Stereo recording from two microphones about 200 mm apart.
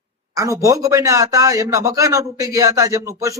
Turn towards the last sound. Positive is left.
turn(degrees=-15)  # may be behind; listen again after turning